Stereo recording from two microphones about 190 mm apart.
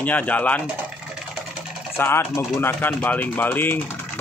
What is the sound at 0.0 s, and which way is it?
Speech, 10° left (ahead or behind).